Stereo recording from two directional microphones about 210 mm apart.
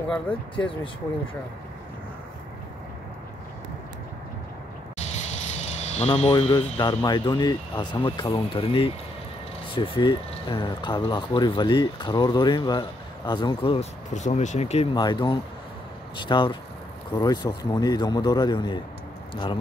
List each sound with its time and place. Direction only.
0.3 s speech: 25° left (ahead or behind)
5.1 s speech: 30° left (ahead or behind)